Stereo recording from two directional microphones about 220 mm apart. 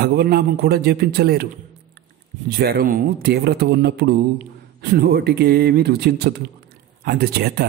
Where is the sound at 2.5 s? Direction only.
45° right (ahead or behind).